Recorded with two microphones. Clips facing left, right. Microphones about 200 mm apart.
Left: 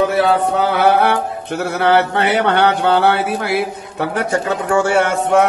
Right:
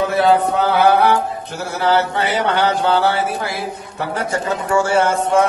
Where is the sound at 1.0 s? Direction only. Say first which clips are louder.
Right 1 dB; 60° left (ahead or behind).